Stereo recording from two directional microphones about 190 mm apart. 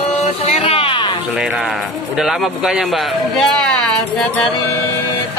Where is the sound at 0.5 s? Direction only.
30° left (ahead or behind).